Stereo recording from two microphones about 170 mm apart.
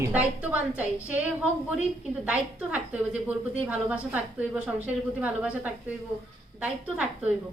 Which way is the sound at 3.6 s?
10° right (ahead or behind).